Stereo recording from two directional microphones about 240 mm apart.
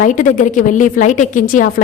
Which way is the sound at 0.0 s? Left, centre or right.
Left.